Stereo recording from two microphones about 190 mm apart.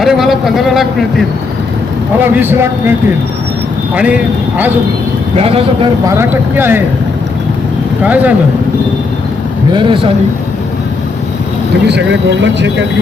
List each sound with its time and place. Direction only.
0.0 s a man's voice: centre (ahead or behind)
2.3 s speech: 10° right (ahead or behind)
3.9 s speech: 5° right (ahead or behind)
5.4 s a man's voice: 30° right (ahead or behind)
6.1 s speech: 15° right (ahead or behind)
8.0 s speech: 10° right (ahead or behind)
9.7 s speech: 25° right (ahead or behind)
11.9 s speech: 70° right (ahead or behind)